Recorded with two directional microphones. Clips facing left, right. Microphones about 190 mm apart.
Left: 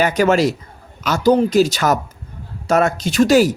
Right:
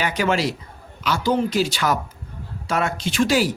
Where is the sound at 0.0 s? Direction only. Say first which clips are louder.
Left 7 dB; 45° left (ahead or behind).